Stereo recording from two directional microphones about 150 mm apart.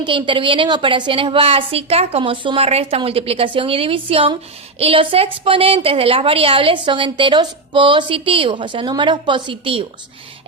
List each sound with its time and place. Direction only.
0.0 s a woman's voice: 30° right (ahead or behind)